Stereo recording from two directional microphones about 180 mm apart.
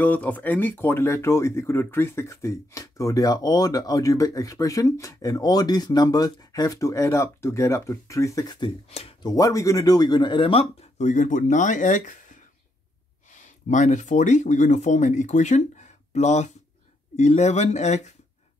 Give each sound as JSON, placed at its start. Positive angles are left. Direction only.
{"t": 0.0, "sound": "speech", "side_deg": 10}
{"t": 9.3, "sound": "speech", "side_deg": 20}
{"t": 13.3, "sound": "speech", "side_deg": 45}